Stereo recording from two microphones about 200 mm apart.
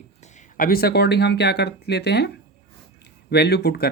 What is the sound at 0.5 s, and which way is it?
Speech, 45° left (ahead or behind).